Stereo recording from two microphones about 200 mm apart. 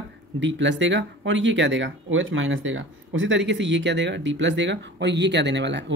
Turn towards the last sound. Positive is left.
turn(degrees=-60)  # may be behind; listen again after turning